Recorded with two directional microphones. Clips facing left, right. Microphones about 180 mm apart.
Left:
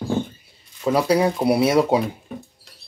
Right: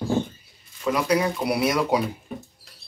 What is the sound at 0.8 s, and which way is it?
Speech, 30° left (ahead or behind).